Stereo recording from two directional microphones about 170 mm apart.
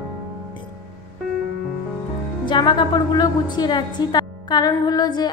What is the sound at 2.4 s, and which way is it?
A woman's voice, 25° left (ahead or behind).